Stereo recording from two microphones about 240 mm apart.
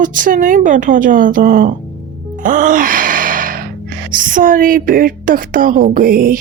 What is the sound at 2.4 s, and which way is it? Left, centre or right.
Music, right.